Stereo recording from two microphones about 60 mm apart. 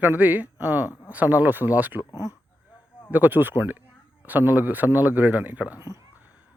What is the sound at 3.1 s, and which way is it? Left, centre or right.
Speech, right.